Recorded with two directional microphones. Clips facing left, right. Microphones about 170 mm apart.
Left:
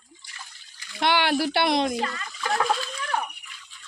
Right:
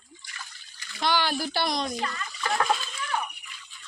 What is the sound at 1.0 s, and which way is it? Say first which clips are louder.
Speech: left 4 dB; 65° left (ahead or behind).